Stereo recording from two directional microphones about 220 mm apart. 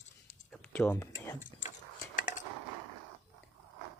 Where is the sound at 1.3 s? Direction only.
35° left (ahead or behind).